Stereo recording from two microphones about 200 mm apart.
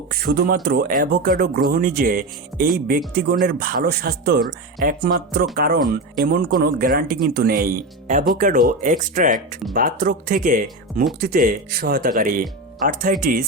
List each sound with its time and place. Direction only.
0.1 s speech: 50° right (ahead or behind)